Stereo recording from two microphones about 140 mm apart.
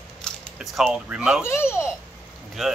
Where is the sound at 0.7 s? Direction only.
Centre (ahead or behind).